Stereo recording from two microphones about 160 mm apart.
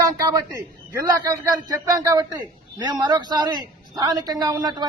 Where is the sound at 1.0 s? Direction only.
25° right (ahead or behind).